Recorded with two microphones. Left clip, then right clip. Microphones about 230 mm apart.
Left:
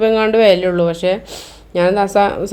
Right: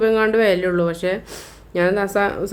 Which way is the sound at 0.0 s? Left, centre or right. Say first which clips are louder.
Left 5 dB; centre.